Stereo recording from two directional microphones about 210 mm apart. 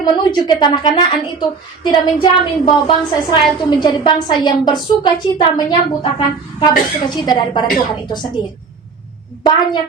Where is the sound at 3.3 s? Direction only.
20° left (ahead or behind).